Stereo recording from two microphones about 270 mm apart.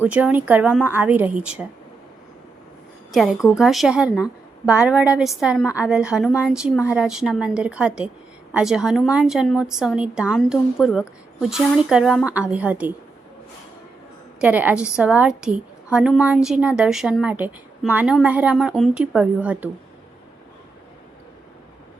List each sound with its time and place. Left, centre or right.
0.0 s a woman's voice: centre
3.1 s a woman's voice: centre
14.4 s a woman's voice: centre